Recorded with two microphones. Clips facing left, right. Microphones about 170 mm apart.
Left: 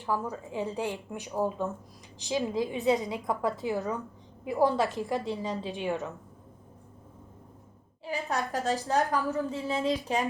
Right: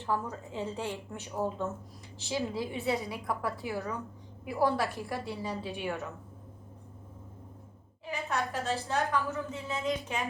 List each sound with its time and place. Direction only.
0.0 s a woman's voice: 10° left (ahead or behind)
8.1 s a woman's voice: 35° left (ahead or behind)